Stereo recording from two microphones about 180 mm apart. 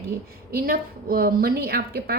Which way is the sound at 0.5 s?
55° right (ahead or behind).